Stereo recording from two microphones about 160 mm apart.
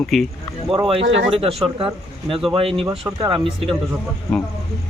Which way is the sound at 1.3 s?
35° right (ahead or behind).